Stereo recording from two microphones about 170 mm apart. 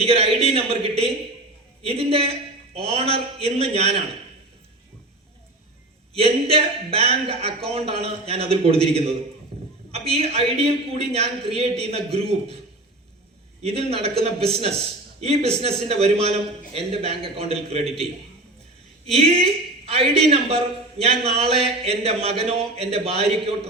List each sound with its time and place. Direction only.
0.0 s a man's voice: 35° right (ahead or behind)
6.1 s a man's voice: 35° right (ahead or behind)
9.5 s a sound: 40° right (ahead or behind)
9.9 s a man's voice: 35° right (ahead or behind)
13.6 s a man's voice: 35° right (ahead or behind)
19.0 s a woman's voice: 35° right (ahead or behind)